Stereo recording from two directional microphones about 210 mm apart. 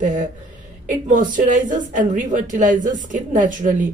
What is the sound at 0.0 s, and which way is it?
A woman's voice, 35° right (ahead or behind).